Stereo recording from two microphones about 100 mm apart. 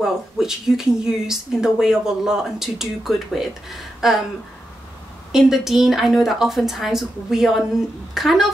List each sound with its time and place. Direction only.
0.0 s speech: 5° right (ahead or behind)
5.3 s speech: 5° right (ahead or behind)